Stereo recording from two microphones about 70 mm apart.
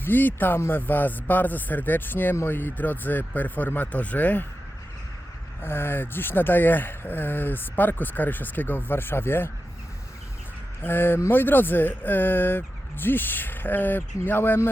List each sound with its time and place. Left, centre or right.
0.0 s speech: left
5.6 s speech: left
10.8 s speech: left